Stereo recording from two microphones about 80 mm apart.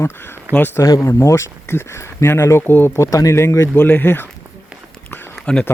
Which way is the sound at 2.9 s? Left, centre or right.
Left.